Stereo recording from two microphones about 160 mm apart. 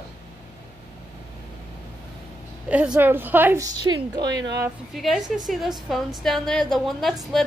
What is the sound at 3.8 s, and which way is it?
Speech, 25° right (ahead or behind).